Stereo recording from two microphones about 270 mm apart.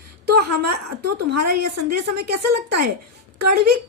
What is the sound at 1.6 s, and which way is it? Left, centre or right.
Speech, right.